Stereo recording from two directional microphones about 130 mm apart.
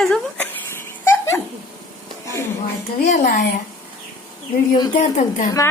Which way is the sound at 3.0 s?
70° left (ahead or behind).